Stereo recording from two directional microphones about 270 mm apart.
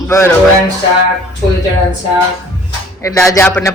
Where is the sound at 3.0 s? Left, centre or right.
Centre.